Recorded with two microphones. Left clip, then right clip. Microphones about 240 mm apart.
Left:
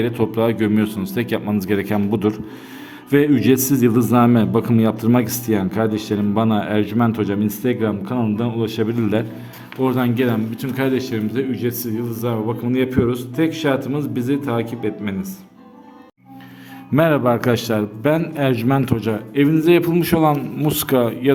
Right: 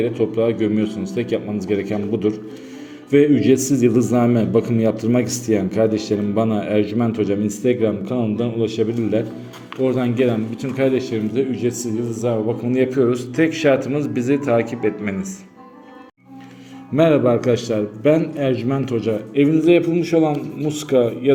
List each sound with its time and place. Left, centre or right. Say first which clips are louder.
0.0 s a man's voice: even; left
16.9 s a man's voice: right 1 dB; left